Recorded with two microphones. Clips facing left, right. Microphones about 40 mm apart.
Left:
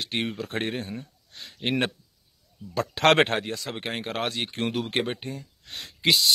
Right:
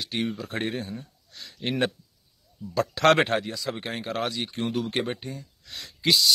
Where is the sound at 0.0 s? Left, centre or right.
Left.